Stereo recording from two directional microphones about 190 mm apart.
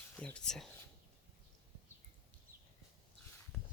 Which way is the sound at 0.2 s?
5° left (ahead or behind).